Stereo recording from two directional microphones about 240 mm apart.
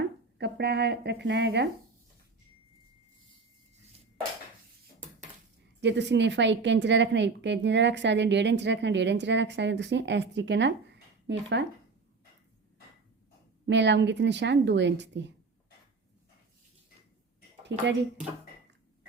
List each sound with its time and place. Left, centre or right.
0.3 s speech: right
5.8 s a woman's voice: right
13.7 s a woman's voice: right
17.7 s a woman's voice: right